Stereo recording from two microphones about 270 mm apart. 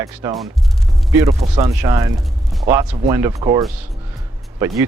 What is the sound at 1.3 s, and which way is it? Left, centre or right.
Speech, right.